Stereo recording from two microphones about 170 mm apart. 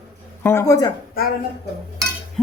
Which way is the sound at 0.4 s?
15° left (ahead or behind).